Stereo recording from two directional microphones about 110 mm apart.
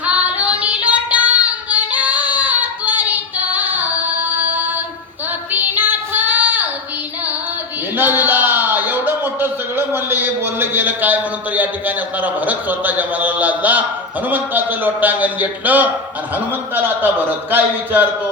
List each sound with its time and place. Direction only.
0.0 s female singing: 10° right (ahead or behind)
5.5 s music: 15° right (ahead or behind)
7.9 s a man's voice: 15° right (ahead or behind)